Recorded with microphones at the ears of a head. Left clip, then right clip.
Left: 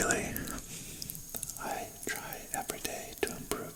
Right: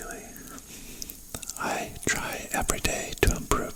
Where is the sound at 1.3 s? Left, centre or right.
Right.